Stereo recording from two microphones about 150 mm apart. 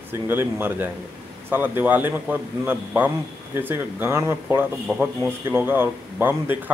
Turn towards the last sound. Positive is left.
turn(degrees=-10)  # may be behind; listen again after turning